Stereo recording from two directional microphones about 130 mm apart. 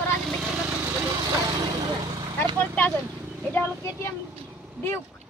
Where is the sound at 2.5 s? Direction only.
15° left (ahead or behind).